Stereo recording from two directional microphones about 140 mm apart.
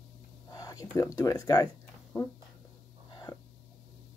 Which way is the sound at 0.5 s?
25° left (ahead or behind).